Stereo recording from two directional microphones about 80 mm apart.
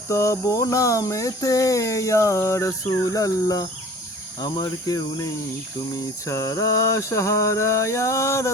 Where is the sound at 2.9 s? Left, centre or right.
Left.